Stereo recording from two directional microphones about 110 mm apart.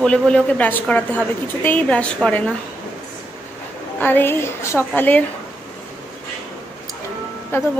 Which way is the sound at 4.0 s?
20° left (ahead or behind).